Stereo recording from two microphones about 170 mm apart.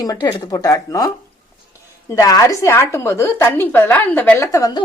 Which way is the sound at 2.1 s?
20° left (ahead or behind).